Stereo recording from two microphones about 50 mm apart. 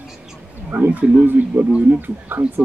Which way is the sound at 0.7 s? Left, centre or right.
Right.